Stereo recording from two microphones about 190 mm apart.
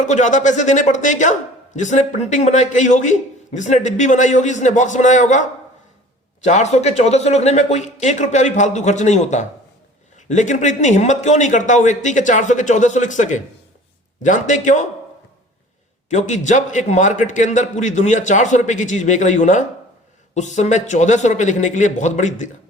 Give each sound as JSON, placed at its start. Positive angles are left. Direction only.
{"t": 0.0, "sound": "speech", "side_deg": 40}
{"t": 16.0, "sound": "speech", "side_deg": 40}